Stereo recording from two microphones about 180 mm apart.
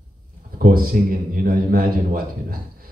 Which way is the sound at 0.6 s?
55° right (ahead or behind).